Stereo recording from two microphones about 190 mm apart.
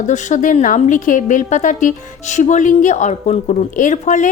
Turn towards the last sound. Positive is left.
turn(degrees=40)  # may be behind; listen again after turning